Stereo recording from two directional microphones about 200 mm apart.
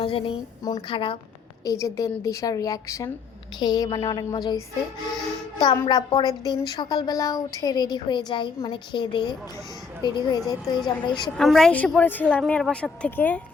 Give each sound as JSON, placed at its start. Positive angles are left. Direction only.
{"t": 0.0, "sound": "a woman's voice", "side_deg": 25}
{"t": 1.6, "sound": "a woman's voice", "side_deg": 15}
{"t": 5.5, "sound": "a woman's voice", "side_deg": 20}
{"t": 11.3, "sound": "a woman's voice", "side_deg": 0}